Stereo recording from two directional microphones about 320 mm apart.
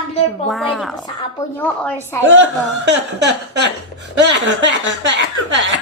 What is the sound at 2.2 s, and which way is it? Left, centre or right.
Speech, right.